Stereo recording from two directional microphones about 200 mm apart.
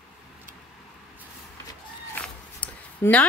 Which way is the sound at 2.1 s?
10° left (ahead or behind).